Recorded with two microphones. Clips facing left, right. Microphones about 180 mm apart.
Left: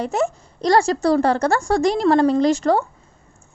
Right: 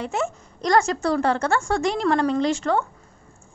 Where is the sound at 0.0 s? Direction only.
40° left (ahead or behind).